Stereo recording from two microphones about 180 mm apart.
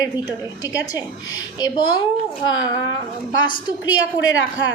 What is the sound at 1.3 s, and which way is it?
A woman's voice, 20° left (ahead or behind).